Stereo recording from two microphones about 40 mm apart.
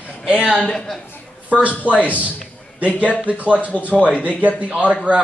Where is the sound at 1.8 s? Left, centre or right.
Right.